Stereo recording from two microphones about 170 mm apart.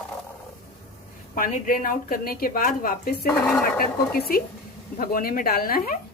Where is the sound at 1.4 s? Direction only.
55° left (ahead or behind).